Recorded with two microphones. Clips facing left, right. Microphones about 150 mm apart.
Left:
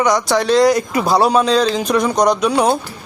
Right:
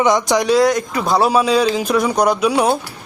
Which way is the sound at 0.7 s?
5° left (ahead or behind).